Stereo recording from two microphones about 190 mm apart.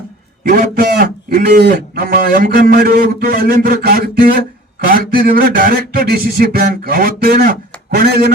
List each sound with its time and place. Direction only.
0.4 s a man's voice: 45° right (ahead or behind)